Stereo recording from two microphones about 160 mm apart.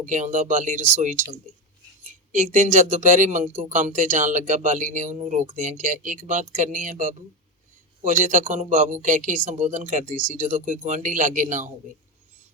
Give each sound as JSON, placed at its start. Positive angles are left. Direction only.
{"t": 0.0, "sound": "speech", "side_deg": -50}